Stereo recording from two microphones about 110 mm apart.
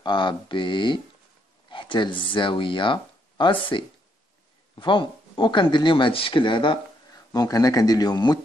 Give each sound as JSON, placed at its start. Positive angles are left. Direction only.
{"t": 0.0, "sound": "speech", "side_deg": 45}
{"t": 7.3, "sound": "a man's voice", "side_deg": 35}